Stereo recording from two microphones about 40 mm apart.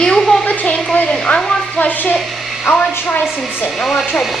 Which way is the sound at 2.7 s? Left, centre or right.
Left.